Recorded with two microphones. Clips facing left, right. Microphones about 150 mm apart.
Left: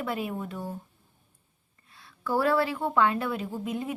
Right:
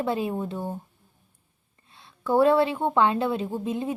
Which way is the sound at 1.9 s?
25° right (ahead or behind).